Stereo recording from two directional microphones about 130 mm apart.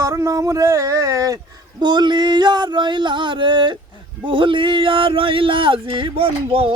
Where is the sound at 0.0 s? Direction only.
25° right (ahead or behind).